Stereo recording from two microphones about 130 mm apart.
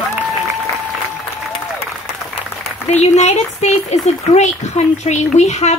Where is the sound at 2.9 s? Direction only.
60° left (ahead or behind).